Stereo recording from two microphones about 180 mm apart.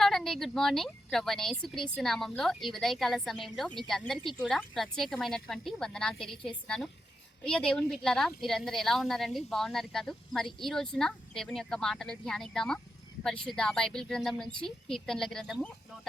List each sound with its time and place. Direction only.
0.0 s a woman's voice: centre (ahead or behind)